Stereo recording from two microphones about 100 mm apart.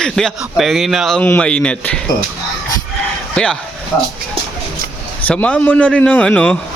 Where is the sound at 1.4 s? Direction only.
10° left (ahead or behind).